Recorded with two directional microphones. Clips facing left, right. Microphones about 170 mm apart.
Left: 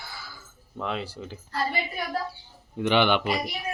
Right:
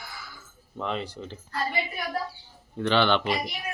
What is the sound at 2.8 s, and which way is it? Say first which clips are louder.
Speech: left 1 dB; 15° left (ahead or behind).